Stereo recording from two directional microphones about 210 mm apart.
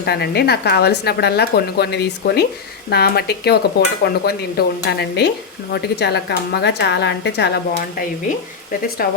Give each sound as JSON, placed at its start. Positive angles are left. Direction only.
{"t": 0.0, "sound": "speech", "side_deg": 50}
{"t": 9.0, "sound": "speech", "side_deg": 45}